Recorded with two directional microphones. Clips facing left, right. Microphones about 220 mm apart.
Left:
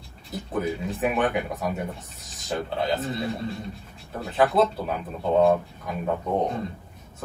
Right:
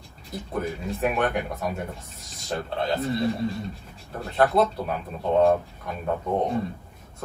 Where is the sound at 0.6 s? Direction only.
Centre (ahead or behind).